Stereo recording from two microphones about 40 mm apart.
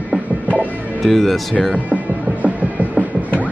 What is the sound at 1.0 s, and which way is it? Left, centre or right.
Speech, centre.